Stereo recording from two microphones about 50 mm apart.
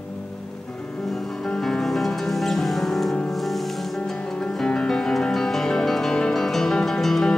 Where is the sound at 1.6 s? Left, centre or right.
Centre.